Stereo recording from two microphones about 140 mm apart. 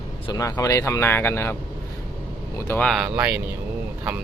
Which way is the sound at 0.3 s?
25° left (ahead or behind).